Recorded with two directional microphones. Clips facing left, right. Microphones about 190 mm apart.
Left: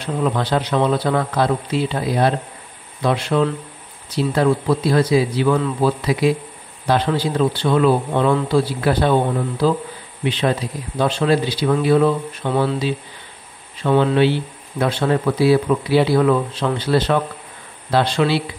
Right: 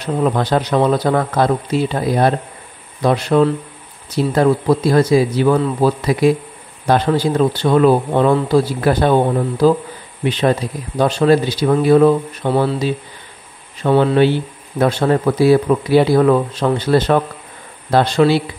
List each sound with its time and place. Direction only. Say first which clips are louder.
0.0 s speech: right 3 dB; 45° right (ahead or behind)